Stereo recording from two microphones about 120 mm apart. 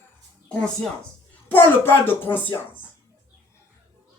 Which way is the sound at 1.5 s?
15° left (ahead or behind).